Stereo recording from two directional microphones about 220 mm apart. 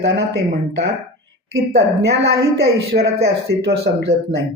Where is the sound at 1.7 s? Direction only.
50° right (ahead or behind).